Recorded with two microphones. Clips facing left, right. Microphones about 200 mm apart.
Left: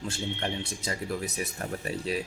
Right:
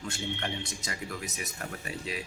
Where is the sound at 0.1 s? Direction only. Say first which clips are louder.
Left 2 dB; 30° left (ahead or behind).